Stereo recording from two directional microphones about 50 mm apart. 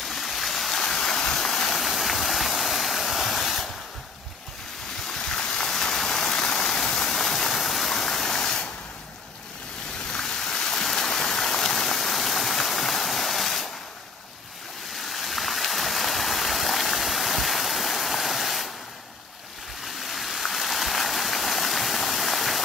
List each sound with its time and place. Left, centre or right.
0.0 s stream: centre
5.0 s rain: centre
10.1 s stream: centre
15.0 s stream: centre
20.0 s stream: centre